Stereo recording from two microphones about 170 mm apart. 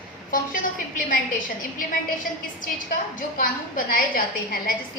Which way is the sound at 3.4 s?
55° left (ahead or behind).